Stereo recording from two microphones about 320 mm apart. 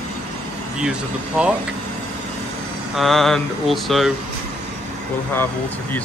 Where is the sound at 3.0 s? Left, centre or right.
Centre.